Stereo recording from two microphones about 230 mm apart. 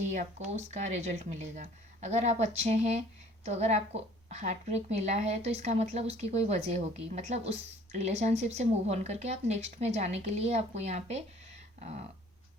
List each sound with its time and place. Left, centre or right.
0.1 s a woman's voice: right